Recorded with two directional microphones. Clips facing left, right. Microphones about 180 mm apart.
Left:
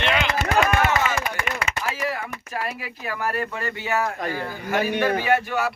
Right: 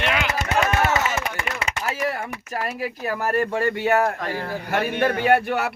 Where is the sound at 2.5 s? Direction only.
40° right (ahead or behind); by 4.1 s 60° right (ahead or behind).